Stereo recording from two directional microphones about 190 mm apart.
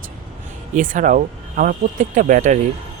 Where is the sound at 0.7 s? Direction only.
40° right (ahead or behind).